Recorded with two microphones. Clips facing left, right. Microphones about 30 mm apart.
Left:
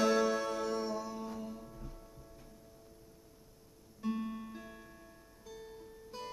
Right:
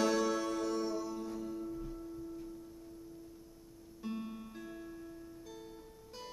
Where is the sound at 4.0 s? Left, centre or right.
Centre.